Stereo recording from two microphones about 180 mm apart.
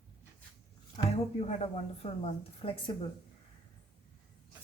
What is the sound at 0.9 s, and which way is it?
Speech, 35° left (ahead or behind).